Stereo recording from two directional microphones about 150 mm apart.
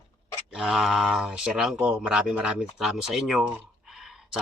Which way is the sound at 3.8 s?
Centre (ahead or behind).